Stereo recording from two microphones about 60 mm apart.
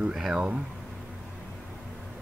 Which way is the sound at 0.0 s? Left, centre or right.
Centre.